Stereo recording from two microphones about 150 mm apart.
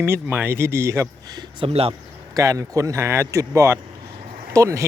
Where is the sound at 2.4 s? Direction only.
20° right (ahead or behind).